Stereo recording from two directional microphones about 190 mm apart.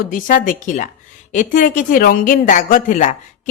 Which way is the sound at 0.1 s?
45° left (ahead or behind).